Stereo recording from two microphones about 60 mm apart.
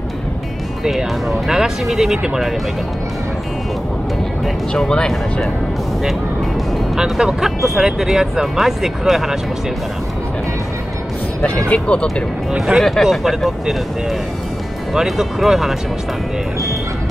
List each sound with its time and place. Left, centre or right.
1.5 s speech: centre
4.7 s speech: centre
7.0 s speech: centre
11.7 s speech: centre
12.5 s speech: centre
12.8 s speech: centre
15.0 s speech: centre